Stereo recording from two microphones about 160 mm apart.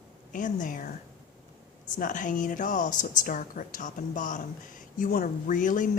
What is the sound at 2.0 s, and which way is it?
A woman's voice, 55° left (ahead or behind).